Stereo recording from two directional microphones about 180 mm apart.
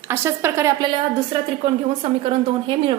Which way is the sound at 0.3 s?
15° right (ahead or behind).